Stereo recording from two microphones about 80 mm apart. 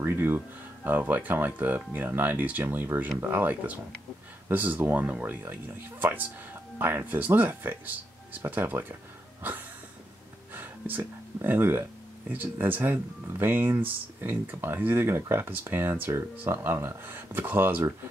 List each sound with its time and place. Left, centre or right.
0.0 s speech: right
10.5 s a sound: right
12.3 s speech: right